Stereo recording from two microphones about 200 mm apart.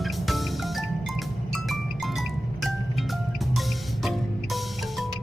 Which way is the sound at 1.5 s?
Centre (ahead or behind).